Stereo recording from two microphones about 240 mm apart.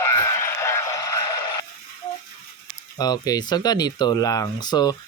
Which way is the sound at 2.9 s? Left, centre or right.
Centre.